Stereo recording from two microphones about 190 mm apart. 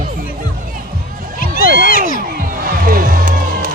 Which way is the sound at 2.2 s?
50° right (ahead or behind).